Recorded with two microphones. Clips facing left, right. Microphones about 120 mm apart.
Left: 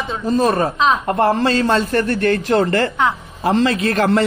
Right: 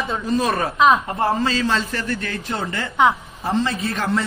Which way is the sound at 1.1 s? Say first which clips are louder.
Left 5 dB; 70° left (ahead or behind).